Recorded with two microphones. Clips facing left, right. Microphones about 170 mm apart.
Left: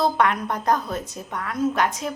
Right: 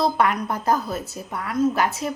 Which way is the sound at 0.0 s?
5° right (ahead or behind).